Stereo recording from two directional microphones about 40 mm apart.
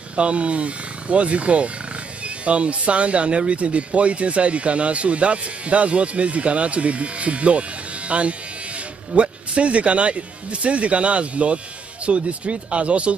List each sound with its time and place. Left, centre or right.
0.1 s speech: right